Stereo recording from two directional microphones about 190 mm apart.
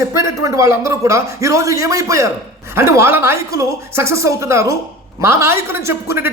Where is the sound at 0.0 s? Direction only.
15° right (ahead or behind).